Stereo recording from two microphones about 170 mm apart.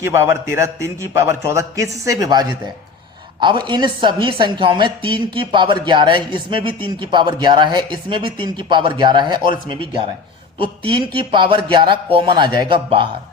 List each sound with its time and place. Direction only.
0.1 s a man's voice: 15° right (ahead or behind)